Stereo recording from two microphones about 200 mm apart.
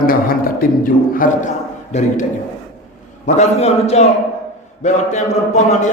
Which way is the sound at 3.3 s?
35° left (ahead or behind).